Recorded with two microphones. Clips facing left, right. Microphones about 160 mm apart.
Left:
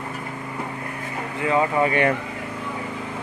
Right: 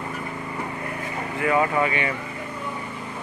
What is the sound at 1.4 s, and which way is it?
Speech, 25° left (ahead or behind).